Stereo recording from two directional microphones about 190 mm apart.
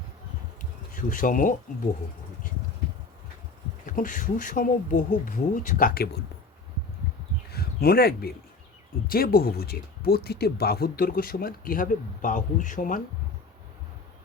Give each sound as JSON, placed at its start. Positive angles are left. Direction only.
{"t": 0.9, "sound": "speech", "side_deg": 45}
{"t": 3.8, "sound": "speech", "side_deg": 45}
{"t": 7.5, "sound": "a sound", "side_deg": 55}
{"t": 9.0, "sound": "speech", "side_deg": 50}